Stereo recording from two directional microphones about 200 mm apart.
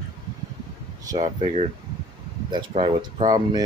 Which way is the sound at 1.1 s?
20° right (ahead or behind).